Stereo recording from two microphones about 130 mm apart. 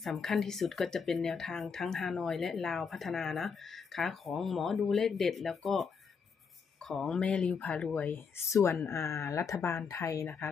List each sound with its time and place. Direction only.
0.0 s speech: centre (ahead or behind); by 10.5 s 20° left (ahead or behind)